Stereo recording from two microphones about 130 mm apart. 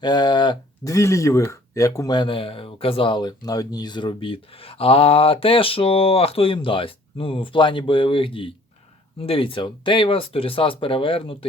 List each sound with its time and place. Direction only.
0.0 s speech: 35° left (ahead or behind)
0.9 s speech: 25° left (ahead or behind); by 11.3 s 45° left (ahead or behind)